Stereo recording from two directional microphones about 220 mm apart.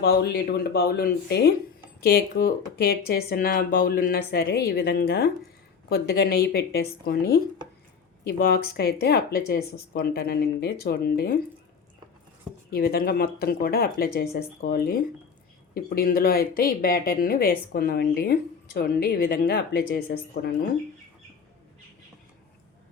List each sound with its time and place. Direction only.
0.0 s a woman's voice: 50° left (ahead or behind)
12.7 s a woman's voice: 45° left (ahead or behind)